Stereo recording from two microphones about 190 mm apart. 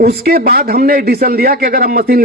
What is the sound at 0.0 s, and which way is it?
A man's voice, 55° right (ahead or behind).